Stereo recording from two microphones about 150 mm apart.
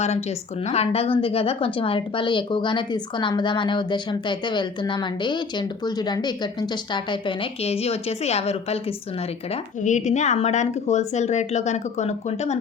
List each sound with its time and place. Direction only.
0.0 s a woman's voice: 45° left (ahead or behind)
9.5 s speech: 55° left (ahead or behind)